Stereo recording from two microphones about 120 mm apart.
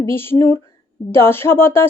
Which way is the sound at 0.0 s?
20° left (ahead or behind).